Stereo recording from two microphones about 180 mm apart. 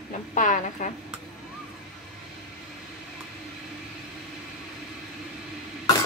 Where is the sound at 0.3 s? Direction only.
45° left (ahead or behind).